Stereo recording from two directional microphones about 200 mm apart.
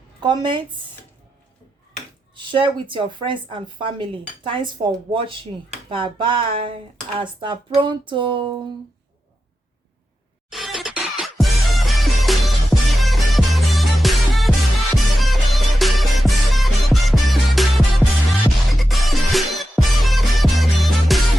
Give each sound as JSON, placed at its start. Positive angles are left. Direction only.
{"t": 0.2, "sound": "a woman's voice", "side_deg": -20}
{"t": 2.3, "sound": "a woman's voice", "side_deg": -25}
{"t": 10.5, "sound": "music", "side_deg": 0}